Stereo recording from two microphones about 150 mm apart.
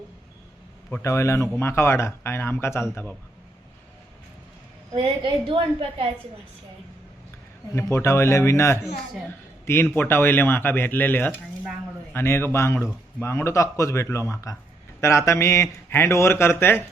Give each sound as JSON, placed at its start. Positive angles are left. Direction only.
{"t": 0.9, "sound": "a man's voice", "side_deg": 15}
{"t": 5.2, "sound": "a woman's voice", "side_deg": -40}
{"t": 7.7, "sound": "a man's voice", "side_deg": 20}
{"t": 9.9, "sound": "a man's voice", "side_deg": 15}